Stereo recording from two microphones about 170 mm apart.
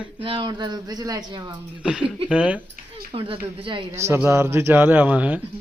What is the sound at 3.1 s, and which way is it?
Speech, 30° right (ahead or behind).